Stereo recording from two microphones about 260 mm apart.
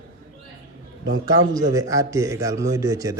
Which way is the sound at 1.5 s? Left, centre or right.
Centre.